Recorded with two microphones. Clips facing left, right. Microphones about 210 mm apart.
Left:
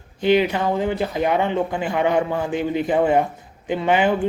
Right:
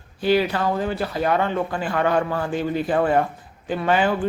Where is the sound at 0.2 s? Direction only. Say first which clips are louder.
Left 2 dB; 20° left (ahead or behind).